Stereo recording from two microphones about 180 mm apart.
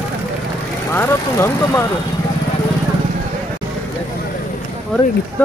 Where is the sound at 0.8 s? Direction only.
15° left (ahead or behind).